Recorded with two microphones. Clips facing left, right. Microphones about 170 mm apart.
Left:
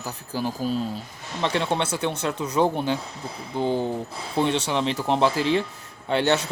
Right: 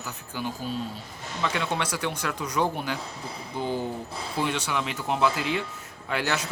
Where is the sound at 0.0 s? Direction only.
35° left (ahead or behind).